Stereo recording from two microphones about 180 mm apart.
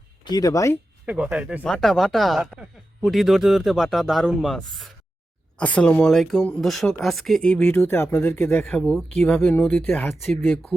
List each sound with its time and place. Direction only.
0.3 s speech: 20° left (ahead or behind)
1.0 s speech: 5° right (ahead or behind)